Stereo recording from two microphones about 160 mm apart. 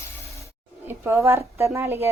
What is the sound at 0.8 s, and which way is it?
A child's voice, 15° right (ahead or behind).